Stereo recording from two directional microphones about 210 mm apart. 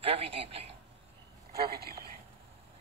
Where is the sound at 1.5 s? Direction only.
45° right (ahead or behind).